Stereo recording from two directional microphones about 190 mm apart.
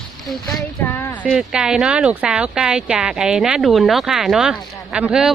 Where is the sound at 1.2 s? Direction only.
5° right (ahead or behind).